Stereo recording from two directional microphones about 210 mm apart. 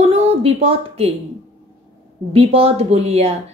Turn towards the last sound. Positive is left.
turn(degrees=-30)  # may be behind; listen again after turning